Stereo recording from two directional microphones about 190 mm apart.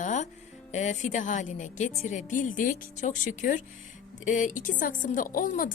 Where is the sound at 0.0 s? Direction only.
40° left (ahead or behind).